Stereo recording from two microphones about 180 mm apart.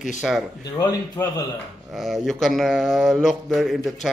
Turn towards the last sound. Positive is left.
turn(degrees=0)  # may be behind; listen again after turning